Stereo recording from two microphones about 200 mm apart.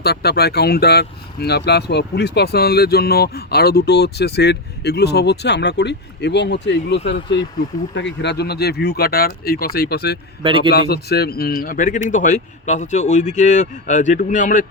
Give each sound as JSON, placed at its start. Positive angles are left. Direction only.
{"t": 0.0, "sound": "speech", "side_deg": 55}
{"t": 10.4, "sound": "a man's voice", "side_deg": -25}
{"t": 10.7, "sound": "speech", "side_deg": 50}